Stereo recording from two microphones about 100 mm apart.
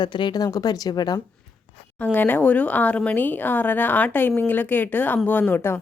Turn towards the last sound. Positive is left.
turn(degrees=25)  # may be behind; listen again after turning